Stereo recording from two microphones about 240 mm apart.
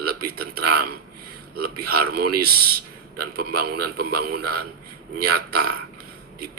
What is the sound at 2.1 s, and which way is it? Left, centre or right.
A man's voice, right.